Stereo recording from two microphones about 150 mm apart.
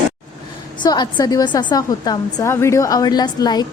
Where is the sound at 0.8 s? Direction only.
30° left (ahead or behind).